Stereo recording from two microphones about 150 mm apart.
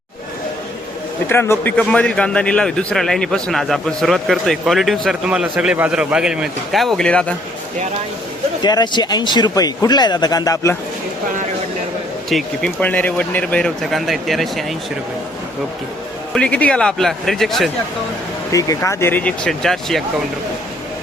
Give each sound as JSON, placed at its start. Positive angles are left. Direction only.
{"t": 1.3, "sound": "a man's voice", "side_deg": 15}
{"t": 8.6, "sound": "speech", "side_deg": 30}
{"t": 12.3, "sound": "a man's voice", "side_deg": 5}
{"t": 16.3, "sound": "a man's voice", "side_deg": 10}
{"t": 18.5, "sound": "speech", "side_deg": 20}